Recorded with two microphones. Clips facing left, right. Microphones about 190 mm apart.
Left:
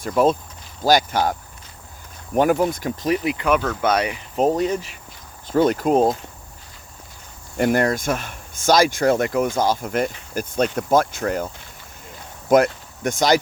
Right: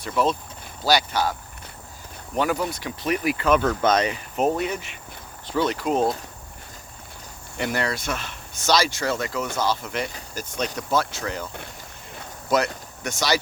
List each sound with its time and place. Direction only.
0.0 s speech: 50° left (ahead or behind)
3.1 s speech: 20° left (ahead or behind)
4.4 s speech: 35° left (ahead or behind)
5.5 s speech: 50° left (ahead or behind)
7.5 s speech: 50° left (ahead or behind)
12.5 s speech: 50° left (ahead or behind)